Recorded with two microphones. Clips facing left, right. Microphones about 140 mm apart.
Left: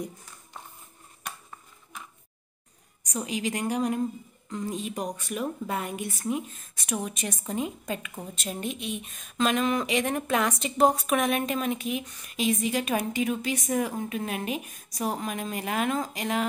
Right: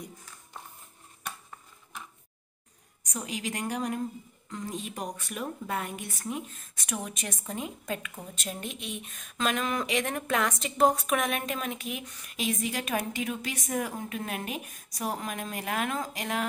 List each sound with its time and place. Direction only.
3.1 s a woman's voice: centre (ahead or behind)